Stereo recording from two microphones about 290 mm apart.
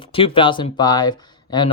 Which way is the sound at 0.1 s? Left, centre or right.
Centre.